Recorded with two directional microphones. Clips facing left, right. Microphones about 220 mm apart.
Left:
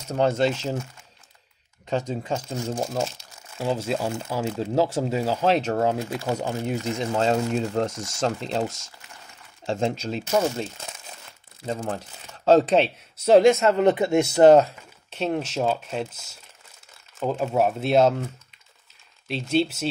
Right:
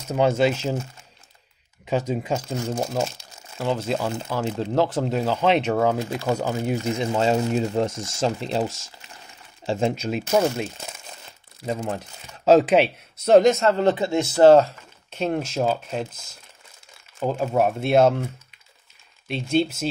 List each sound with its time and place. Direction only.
0.1 s speech: 5° right (ahead or behind)
1.9 s speech: 10° right (ahead or behind)
3.6 s speech: 10° left (ahead or behind); by 7.6 s 5° right (ahead or behind)
7.6 s speech: 20° right (ahead or behind)
8.2 s speech: 5° right (ahead or behind)
13.2 s speech: 5° left (ahead or behind)
13.8 s speech: 20° left (ahead or behind)
15.0 s speech: centre (ahead or behind)